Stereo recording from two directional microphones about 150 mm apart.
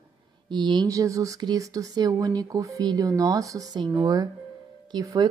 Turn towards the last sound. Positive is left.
turn(degrees=-25)  # may be behind; listen again after turning